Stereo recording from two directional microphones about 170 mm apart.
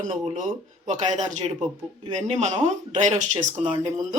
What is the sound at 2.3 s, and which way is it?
Speech, 45° right (ahead or behind).